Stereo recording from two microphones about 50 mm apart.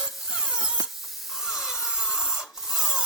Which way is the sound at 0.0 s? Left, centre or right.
Centre.